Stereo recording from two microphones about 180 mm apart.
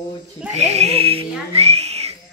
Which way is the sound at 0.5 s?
35° right (ahead or behind).